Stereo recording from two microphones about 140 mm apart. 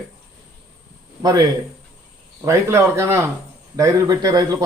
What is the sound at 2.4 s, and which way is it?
Speech, 20° right (ahead or behind).